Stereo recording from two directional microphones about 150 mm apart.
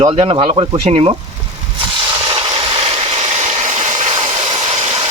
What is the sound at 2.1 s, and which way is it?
Vehicle, 30° right (ahead or behind).